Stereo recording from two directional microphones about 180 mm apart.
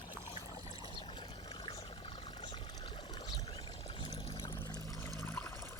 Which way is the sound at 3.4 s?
30° left (ahead or behind).